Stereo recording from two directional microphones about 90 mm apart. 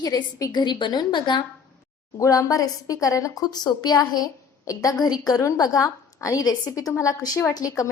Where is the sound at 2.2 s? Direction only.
40° left (ahead or behind).